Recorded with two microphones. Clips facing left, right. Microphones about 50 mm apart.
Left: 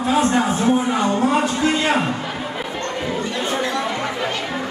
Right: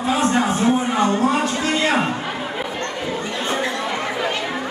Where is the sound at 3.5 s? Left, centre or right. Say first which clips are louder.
Right 2 dB; centre.